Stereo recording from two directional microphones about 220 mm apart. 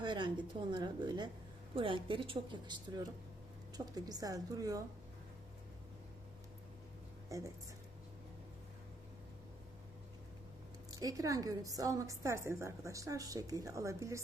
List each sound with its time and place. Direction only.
0.0 s a woman's voice: 20° right (ahead or behind)
7.3 s a woman's voice: 15° right (ahead or behind)
10.9 s a woman's voice: 15° right (ahead or behind)